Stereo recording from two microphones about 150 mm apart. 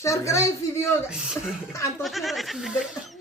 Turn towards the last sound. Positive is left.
turn(degrees=-5)  # may be behind; listen again after turning